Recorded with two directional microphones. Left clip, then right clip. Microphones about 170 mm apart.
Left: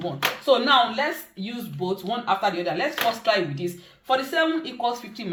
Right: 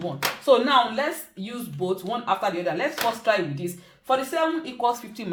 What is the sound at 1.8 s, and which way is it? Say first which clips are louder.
Speech: even; 50° right (ahead or behind).